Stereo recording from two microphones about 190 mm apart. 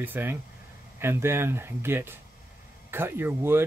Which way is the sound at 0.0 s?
10° right (ahead or behind).